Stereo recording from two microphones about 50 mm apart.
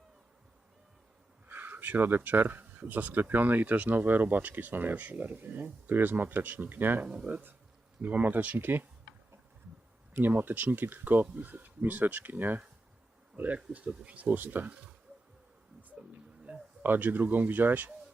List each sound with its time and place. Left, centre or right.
1.5 s speech: right
8.0 s speech: right
10.2 s speech: right
16.5 s a sound: right
16.8 s speech: right